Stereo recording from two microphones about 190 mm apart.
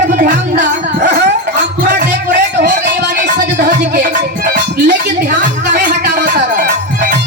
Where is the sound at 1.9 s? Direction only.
65° right (ahead or behind).